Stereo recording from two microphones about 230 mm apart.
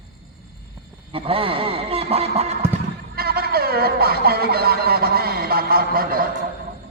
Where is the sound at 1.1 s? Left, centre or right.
Right.